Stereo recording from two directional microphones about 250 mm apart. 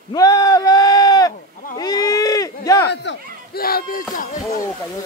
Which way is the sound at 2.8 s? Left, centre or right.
Left.